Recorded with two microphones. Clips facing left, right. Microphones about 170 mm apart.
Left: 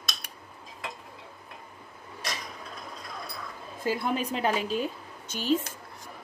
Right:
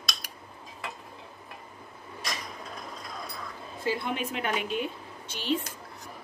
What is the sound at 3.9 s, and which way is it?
A woman's voice, 40° left (ahead or behind).